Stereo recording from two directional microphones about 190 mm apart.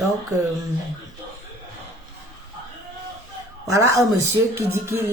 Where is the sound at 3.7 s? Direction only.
15° right (ahead or behind).